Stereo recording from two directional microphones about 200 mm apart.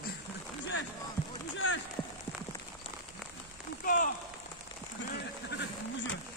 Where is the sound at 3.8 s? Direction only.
40° left (ahead or behind).